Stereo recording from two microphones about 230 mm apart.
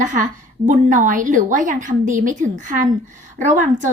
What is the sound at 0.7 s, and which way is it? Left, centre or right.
A woman's voice, right.